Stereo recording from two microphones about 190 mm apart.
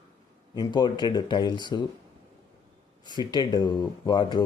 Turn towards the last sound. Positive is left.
turn(degrees=20)  # may be behind; listen again after turning